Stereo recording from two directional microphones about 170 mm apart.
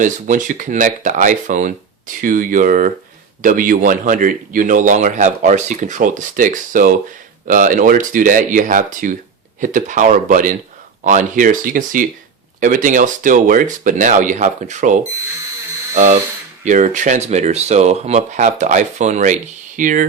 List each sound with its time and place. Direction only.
0.0 s speech: 50° right (ahead or behind)
16.6 s speech: 45° right (ahead or behind)